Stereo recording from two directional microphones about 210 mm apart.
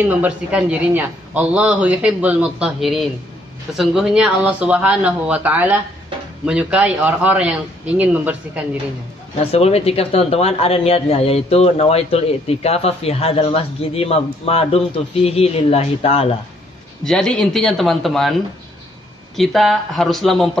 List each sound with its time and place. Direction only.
0.0 s a man's voice: 5° right (ahead or behind)
9.4 s speech: 30° left (ahead or behind)
17.0 s a man's voice: 5° left (ahead or behind)
19.3 s a man's voice: centre (ahead or behind)